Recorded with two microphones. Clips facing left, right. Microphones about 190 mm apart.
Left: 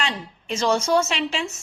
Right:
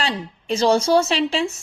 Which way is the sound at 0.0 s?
35° right (ahead or behind).